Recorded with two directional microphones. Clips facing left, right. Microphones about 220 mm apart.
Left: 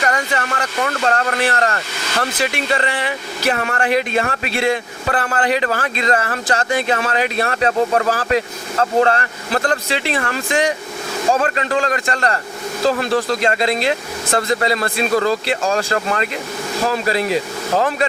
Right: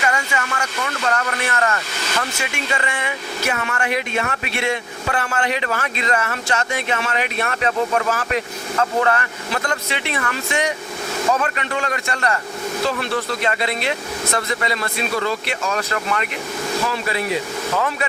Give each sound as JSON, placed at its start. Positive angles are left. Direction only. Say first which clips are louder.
{"t": 0.0, "sound": "speech", "louder": "left 3 dB", "side_deg": 50}
{"t": 1.0, "sound": "speech", "louder": "left 3 dB", "side_deg": 35}